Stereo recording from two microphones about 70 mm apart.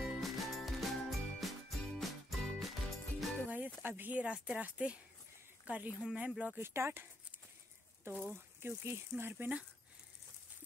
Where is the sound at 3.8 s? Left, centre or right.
Right.